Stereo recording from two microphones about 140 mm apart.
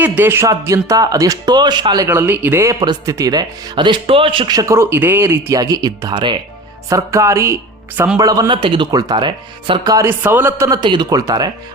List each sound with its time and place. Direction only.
0.0 s speech: 15° right (ahead or behind); by 2.0 s 30° right (ahead or behind)
2.0 s speech: 15° right (ahead or behind); by 6.4 s 30° right (ahead or behind)
6.9 s speech: 20° right (ahead or behind)
10.7 s speech: 35° right (ahead or behind)